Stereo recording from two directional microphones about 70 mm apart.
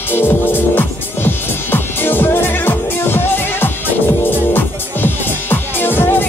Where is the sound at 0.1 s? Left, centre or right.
Left.